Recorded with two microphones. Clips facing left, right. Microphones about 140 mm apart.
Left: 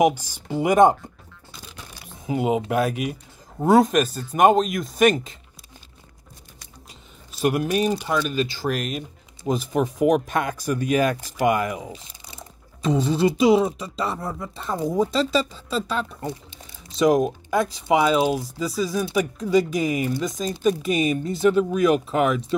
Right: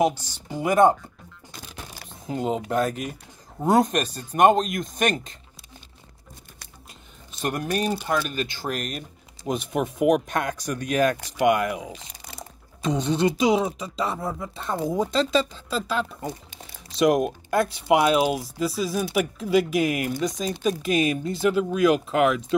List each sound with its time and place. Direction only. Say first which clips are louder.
0.6 s speech: left 2 dB; 20° left (ahead or behind)
2.2 s speech: left 4 dB; 10° left (ahead or behind)
2.9 s speech: left 4 dB; 40° right (ahead or behind)
3.6 s speech: left 4 dB; centre (ahead or behind)
7.3 s speech: left 5 dB; 5° left (ahead or behind)
8.4 s speech: left 4 dB; 45° right (ahead or behind)
9.5 s speech: left 3 dB; centre (ahead or behind)